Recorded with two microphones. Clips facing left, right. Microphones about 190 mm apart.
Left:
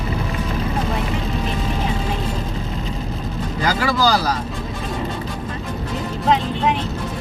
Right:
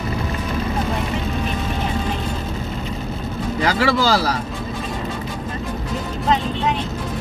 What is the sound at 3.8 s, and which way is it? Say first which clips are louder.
Speech: even; 30° right (ahead or behind).